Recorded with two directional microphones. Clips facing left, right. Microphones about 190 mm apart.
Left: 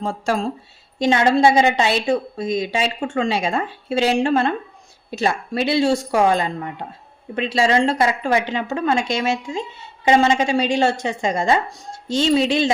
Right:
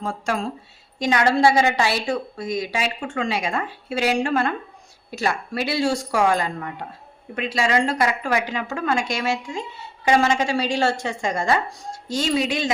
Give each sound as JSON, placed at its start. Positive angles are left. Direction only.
{"t": 0.0, "sound": "a woman's voice", "side_deg": 30}